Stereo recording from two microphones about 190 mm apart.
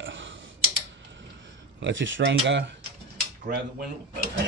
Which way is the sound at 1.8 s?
75° right (ahead or behind).